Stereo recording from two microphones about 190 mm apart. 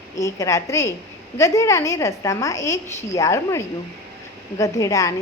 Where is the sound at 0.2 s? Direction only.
15° left (ahead or behind).